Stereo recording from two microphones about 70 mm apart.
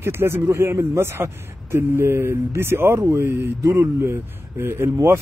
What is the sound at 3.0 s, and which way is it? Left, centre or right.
Speech, right.